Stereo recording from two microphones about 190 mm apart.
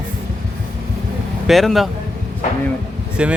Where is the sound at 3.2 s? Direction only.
5° right (ahead or behind).